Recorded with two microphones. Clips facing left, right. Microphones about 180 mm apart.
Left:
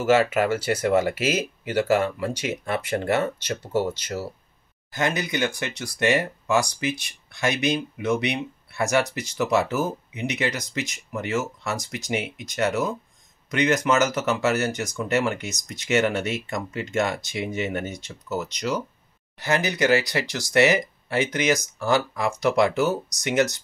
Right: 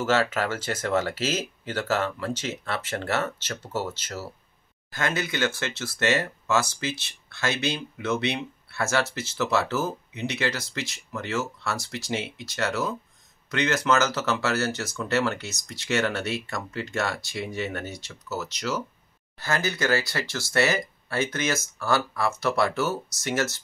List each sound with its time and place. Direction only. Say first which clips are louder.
0.0 s speech: left 5 dB; 10° left (ahead or behind)